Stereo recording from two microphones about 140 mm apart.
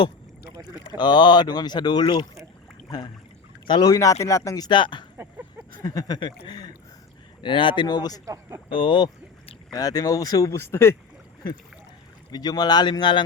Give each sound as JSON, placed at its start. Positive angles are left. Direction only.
{"t": 0.9, "sound": "speech", "side_deg": 30}
{"t": 3.7, "sound": "a man's voice", "side_deg": 30}
{"t": 5.1, "sound": "a sound", "side_deg": -15}
{"t": 5.8, "sound": "a man's voice", "side_deg": 25}
{"t": 8.2, "sound": "speech", "side_deg": -20}
{"t": 8.7, "sound": "a man's voice", "side_deg": 35}
{"t": 12.3, "sound": "speech", "side_deg": 30}